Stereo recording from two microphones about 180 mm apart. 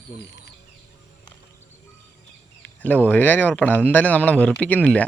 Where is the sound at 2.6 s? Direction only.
10° left (ahead or behind).